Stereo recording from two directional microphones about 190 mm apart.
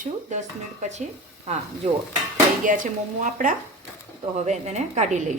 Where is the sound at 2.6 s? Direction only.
45° right (ahead or behind).